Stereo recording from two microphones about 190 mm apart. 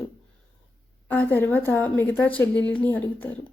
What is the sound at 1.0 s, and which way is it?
Speech, 10° left (ahead or behind).